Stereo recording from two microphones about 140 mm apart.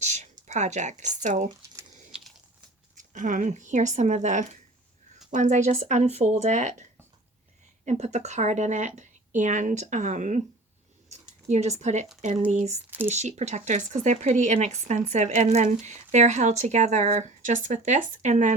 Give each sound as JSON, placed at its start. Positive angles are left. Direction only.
{"t": 0.1, "sound": "a sound", "side_deg": -55}
{"t": 1.2, "sound": "speech", "side_deg": -60}
{"t": 3.0, "sound": "speech", "side_deg": -65}
{"t": 7.9, "sound": "speech", "side_deg": -55}
{"t": 11.1, "sound": "a sound", "side_deg": -55}
{"t": 12.5, "sound": "speech", "side_deg": -55}